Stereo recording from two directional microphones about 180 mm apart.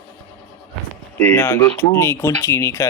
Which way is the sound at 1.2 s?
10° left (ahead or behind).